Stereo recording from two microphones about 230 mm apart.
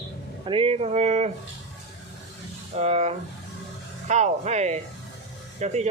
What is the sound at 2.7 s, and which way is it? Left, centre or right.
Speech, right.